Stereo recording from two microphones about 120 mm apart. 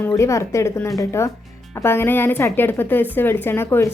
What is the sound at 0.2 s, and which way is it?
A woman's voice, 25° left (ahead or behind).